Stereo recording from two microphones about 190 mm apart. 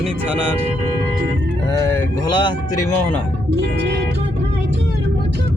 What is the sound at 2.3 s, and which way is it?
Speech, 25° left (ahead or behind).